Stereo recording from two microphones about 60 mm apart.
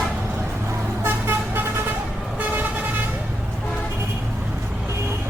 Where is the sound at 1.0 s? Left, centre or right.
Right.